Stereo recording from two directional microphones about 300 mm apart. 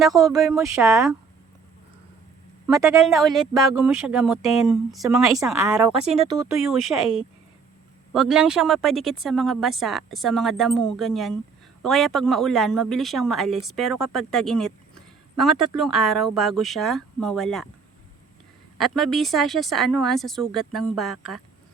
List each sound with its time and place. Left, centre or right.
0.1 s speech: centre
3.1 s a woman's voice: centre
5.9 s speech: centre
6.5 s a woman's voice: centre
18.8 s a woman's voice: centre